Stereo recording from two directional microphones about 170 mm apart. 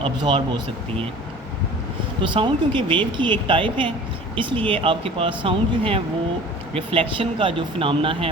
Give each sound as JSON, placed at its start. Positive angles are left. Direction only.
{"t": 0.0, "sound": "speech", "side_deg": -30}
{"t": 2.2, "sound": "speech", "side_deg": -30}